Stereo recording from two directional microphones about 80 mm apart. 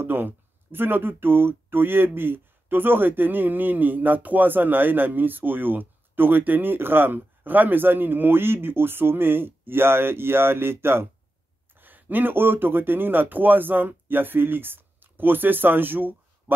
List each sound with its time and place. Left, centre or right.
0.0 s speech: right